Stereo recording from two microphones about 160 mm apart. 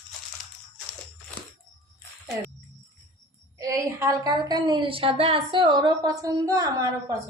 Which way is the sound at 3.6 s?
20° right (ahead or behind).